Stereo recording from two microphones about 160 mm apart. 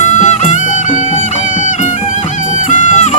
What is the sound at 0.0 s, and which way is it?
Music, 45° left (ahead or behind).